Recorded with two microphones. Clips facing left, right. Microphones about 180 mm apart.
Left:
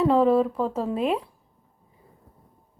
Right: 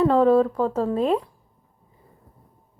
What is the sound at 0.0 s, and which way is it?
Speech, centre (ahead or behind).